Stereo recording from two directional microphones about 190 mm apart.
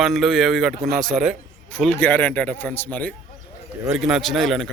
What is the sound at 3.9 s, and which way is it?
Speech, centre (ahead or behind).